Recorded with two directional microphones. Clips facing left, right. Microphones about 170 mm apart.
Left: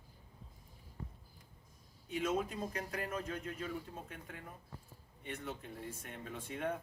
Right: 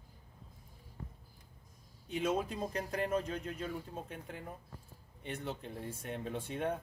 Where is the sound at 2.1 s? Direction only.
30° right (ahead or behind).